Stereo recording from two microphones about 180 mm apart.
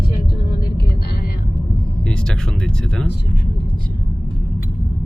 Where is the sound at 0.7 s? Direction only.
60° left (ahead or behind).